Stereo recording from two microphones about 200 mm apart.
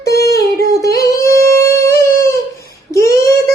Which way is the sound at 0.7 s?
15° left (ahead or behind).